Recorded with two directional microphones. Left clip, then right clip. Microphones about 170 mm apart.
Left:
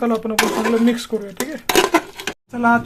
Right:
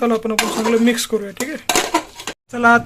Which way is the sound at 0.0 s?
5° right (ahead or behind).